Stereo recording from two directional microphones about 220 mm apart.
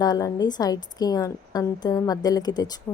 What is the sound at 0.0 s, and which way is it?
A woman's voice, 15° left (ahead or behind).